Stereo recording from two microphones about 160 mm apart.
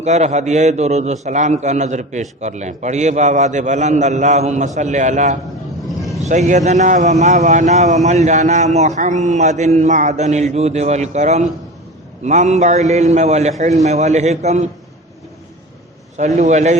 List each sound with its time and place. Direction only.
0.0 s a man's voice: 45° right (ahead or behind)
16.1 s a man's voice: 45° right (ahead or behind)